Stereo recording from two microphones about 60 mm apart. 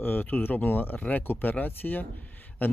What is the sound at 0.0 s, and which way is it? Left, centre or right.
Speech, left.